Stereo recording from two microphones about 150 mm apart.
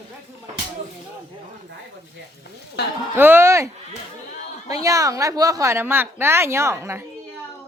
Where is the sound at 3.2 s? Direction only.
15° right (ahead or behind).